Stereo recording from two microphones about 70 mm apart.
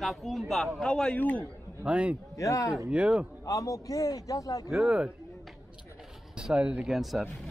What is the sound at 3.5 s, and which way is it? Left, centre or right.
A man's voice, left.